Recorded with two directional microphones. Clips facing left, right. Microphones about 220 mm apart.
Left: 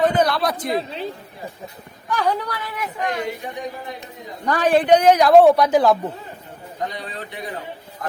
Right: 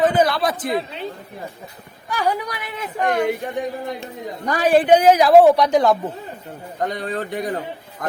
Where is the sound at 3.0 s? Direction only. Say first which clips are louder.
Right 6 dB; 55° right (ahead or behind).